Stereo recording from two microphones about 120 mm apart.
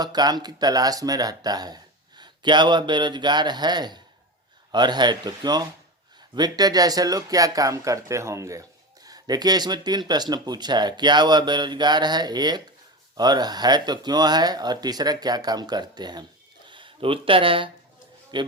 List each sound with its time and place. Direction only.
0.0 s speech: 35° right (ahead or behind)